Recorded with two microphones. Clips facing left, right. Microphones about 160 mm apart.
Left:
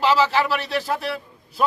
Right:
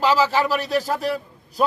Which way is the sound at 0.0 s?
40° right (ahead or behind).